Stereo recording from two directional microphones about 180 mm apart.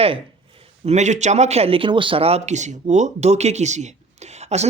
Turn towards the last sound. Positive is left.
turn(degrees=-40)  # may be behind; listen again after turning